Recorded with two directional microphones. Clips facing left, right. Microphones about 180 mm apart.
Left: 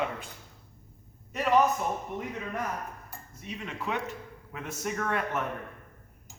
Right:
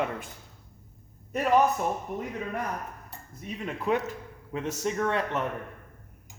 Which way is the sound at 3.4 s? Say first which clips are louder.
Right 5 dB; 40° right (ahead or behind).